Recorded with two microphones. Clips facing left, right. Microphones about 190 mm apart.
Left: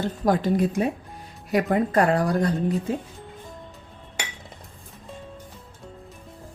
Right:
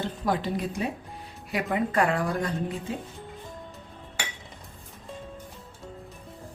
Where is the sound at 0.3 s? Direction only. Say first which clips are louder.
Left 7 dB; 45° left (ahead or behind).